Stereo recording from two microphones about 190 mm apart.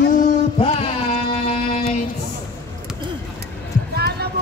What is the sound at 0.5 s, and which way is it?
Music, 30° left (ahead or behind).